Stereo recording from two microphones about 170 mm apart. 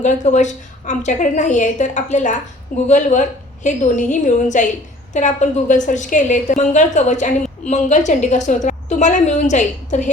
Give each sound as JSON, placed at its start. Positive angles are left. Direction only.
{"t": 0.0, "sound": "a woman's voice", "side_deg": 45}